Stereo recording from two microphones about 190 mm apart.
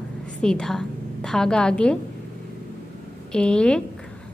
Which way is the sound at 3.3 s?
5° left (ahead or behind).